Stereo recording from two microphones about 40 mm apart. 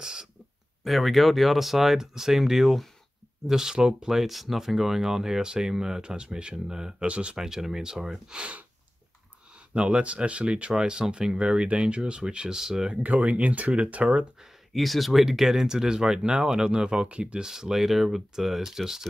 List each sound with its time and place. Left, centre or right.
0.0 s a sound: right
0.8 s speech: centre
7.1 s speech: right
7.3 s speech: centre
8.4 s speech: right
9.8 s speech: right
12.9 s speech: right
14.7 s speech: centre; by 17.5 s right
17.5 s speech: centre